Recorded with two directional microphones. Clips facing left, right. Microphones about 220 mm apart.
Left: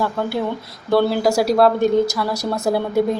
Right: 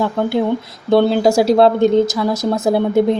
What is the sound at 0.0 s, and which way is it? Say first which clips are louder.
Speech: right 5 dB; 20° right (ahead or behind).